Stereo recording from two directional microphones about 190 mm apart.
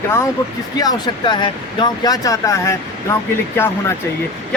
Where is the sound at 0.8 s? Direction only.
20° left (ahead or behind).